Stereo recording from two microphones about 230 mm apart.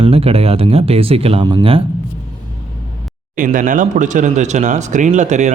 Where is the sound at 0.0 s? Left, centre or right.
Right.